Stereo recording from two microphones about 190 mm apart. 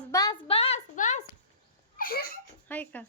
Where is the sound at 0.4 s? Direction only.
30° left (ahead or behind).